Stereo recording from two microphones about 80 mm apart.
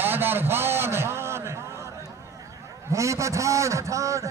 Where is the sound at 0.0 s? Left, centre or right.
Right.